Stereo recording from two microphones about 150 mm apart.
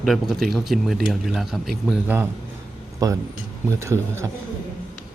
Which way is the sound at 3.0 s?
25° right (ahead or behind).